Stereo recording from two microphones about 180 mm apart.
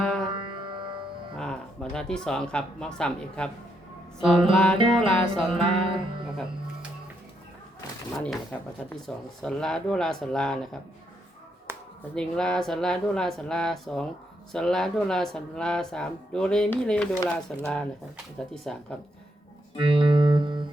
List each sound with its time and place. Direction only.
0.3 s music: 25° right (ahead or behind)
1.4 s speech: 5° left (ahead or behind)
5.5 s music: 30° right (ahead or behind)
8.1 s speech: centre (ahead or behind)
11.7 s a sound: 15° right (ahead or behind)
12.1 s speech: 5° left (ahead or behind)
19.8 s music: 30° right (ahead or behind)